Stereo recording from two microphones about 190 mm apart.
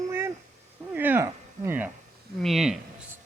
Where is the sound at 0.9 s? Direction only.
10° right (ahead or behind).